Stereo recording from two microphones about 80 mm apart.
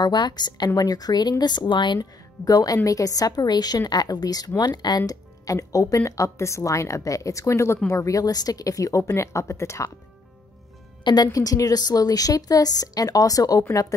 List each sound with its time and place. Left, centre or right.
0.0 s a woman's voice: left
2.0 s speech: left
11.3 s speech: left